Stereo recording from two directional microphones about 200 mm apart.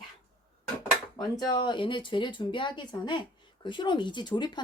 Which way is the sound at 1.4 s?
20° left (ahead or behind).